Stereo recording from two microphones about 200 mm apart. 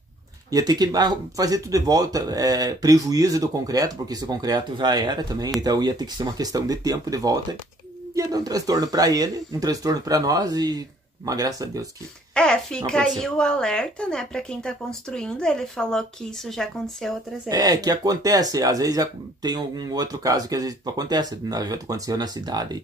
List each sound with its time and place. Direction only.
0.5 s speech: 20° right (ahead or behind)
12.4 s a woman's voice: 5° left (ahead or behind)
17.5 s speech: 20° right (ahead or behind)